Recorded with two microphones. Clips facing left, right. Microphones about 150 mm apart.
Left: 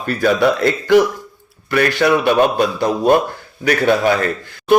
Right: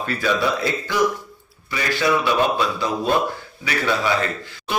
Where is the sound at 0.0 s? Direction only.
50° left (ahead or behind).